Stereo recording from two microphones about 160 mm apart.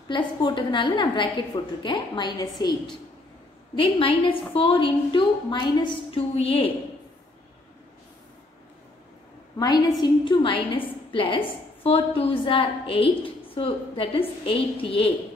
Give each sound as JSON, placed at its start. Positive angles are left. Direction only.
{"t": 0.1, "sound": "a woman's voice", "side_deg": 30}
{"t": 3.7, "sound": "a woman's voice", "side_deg": 35}
{"t": 10.2, "sound": "a woman's voice", "side_deg": 30}